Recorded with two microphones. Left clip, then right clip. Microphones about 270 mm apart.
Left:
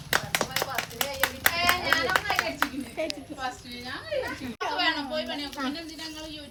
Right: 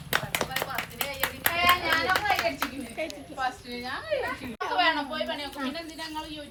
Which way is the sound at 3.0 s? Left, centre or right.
Left.